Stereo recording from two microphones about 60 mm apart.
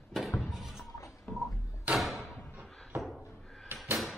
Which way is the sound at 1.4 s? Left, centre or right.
Left.